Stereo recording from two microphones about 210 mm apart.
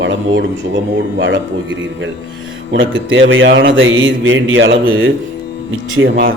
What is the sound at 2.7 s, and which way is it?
Speech, 65° right (ahead or behind).